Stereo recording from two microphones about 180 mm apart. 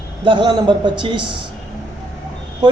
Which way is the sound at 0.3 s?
25° right (ahead or behind).